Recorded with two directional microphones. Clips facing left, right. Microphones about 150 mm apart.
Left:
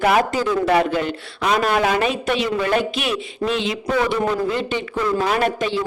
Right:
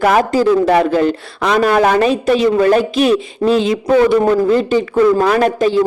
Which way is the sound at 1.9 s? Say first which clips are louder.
Right 8 dB; 35° right (ahead or behind).